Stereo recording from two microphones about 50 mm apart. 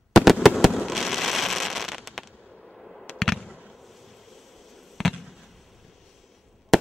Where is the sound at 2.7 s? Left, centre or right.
Centre.